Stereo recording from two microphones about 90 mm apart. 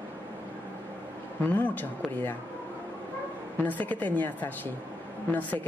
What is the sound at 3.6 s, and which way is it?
A woman's voice, 20° left (ahead or behind).